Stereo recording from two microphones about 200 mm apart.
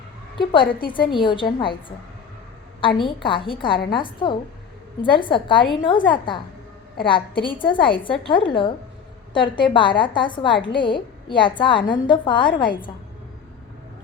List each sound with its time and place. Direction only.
0.3 s a woman's voice: 25° left (ahead or behind)
3.2 s a woman's voice: 25° left (ahead or behind)